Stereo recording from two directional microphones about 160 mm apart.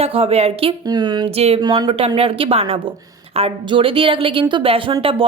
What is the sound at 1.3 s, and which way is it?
Speech, 40° right (ahead or behind).